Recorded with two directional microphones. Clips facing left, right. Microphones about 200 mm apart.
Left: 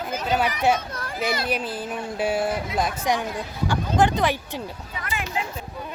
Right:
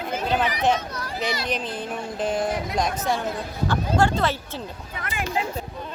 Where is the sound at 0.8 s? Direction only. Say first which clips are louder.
Right 1 dB; 50° left (ahead or behind).